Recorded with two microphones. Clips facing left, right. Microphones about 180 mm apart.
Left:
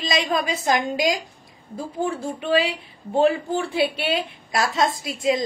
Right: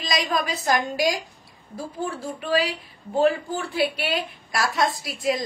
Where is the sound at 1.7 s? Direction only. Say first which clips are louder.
Left 4 dB; 25° left (ahead or behind).